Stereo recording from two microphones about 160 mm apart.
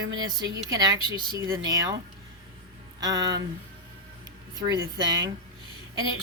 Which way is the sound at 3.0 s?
25° right (ahead or behind).